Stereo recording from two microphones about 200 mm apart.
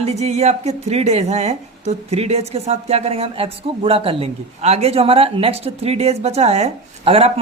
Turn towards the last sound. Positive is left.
turn(degrees=-30)  # may be behind; listen again after turning